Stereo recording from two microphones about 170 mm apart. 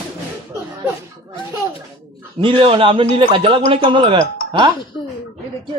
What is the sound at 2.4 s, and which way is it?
A man's voice, 30° right (ahead or behind).